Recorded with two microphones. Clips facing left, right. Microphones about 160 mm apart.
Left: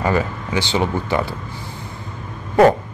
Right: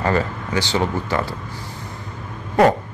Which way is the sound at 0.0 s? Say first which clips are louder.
Left 1 dB; 10° left (ahead or behind).